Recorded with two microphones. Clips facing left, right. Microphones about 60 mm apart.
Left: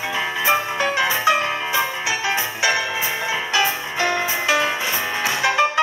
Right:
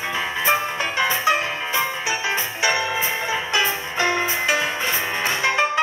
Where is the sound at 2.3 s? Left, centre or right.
Right.